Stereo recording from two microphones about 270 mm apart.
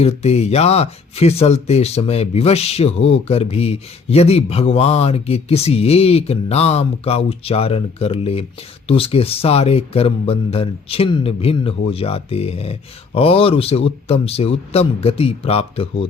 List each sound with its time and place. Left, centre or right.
0.0 s speech: left